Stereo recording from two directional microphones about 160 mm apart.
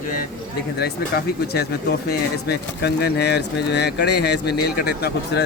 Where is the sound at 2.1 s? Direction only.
90° left.